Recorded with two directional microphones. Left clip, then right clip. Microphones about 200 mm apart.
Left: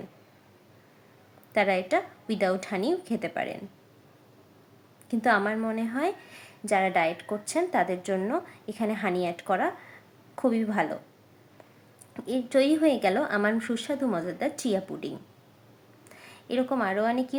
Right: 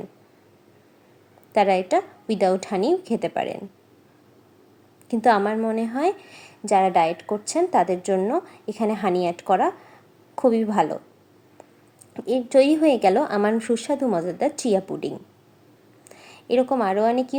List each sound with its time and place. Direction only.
1.5 s a woman's voice: 20° right (ahead or behind)
5.0 s a woman's voice: 20° right (ahead or behind)
12.1 s a woman's voice: 25° right (ahead or behind)